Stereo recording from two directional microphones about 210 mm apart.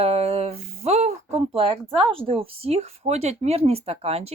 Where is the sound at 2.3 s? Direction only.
30° right (ahead or behind).